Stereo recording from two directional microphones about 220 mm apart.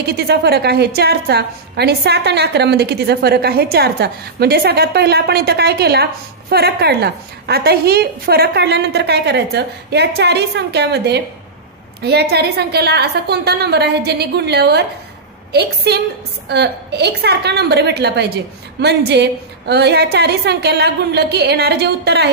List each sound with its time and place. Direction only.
0.0 s a woman's voice: 50° right (ahead or behind)